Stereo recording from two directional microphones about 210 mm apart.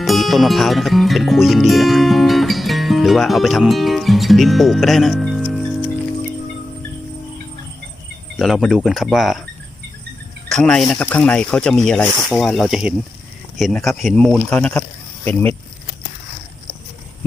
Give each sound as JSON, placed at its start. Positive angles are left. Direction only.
{"t": 0.0, "sound": "speech", "side_deg": 0}
{"t": 8.4, "sound": "speech", "side_deg": 0}
{"t": 10.5, "sound": "speech", "side_deg": 0}